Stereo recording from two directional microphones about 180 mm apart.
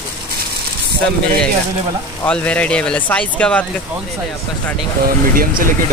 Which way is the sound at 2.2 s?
10° left (ahead or behind).